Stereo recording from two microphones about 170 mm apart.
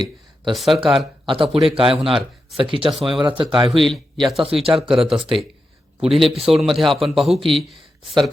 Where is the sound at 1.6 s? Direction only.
30° right (ahead or behind).